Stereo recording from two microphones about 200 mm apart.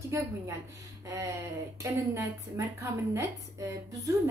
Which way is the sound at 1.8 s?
15° right (ahead or behind).